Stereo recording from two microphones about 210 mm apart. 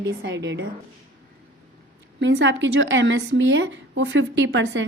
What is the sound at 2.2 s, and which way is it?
A woman's voice, 60° right (ahead or behind).